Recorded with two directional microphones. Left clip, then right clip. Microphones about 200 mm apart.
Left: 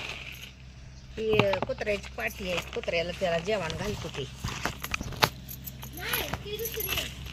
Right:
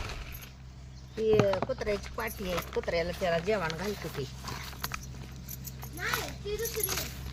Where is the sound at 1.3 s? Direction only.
5° left (ahead or behind); by 3.9 s 20° right (ahead or behind).